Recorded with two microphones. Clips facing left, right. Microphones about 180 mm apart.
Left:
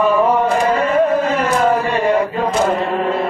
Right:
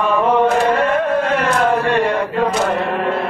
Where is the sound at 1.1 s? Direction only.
60° right (ahead or behind).